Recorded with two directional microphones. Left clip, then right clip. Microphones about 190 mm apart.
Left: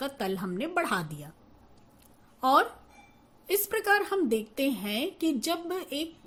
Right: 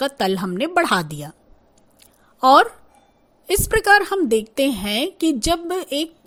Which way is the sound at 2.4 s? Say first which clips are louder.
Right 11 dB; 45° right (ahead or behind).